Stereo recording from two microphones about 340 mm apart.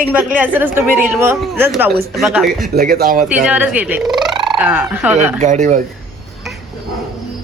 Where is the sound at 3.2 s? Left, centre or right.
Centre.